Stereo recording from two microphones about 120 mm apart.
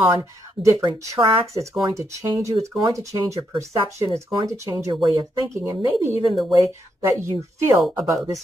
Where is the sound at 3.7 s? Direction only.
50° right (ahead or behind).